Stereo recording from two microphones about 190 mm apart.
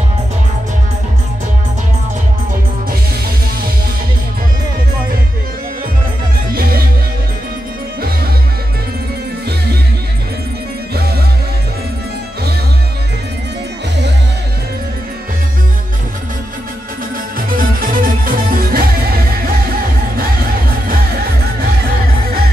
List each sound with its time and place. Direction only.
6.5 s music: 50° right (ahead or behind)
17.6 s music: 50° right (ahead or behind)